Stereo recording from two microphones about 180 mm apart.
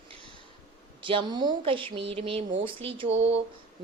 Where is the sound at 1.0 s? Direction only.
25° right (ahead or behind).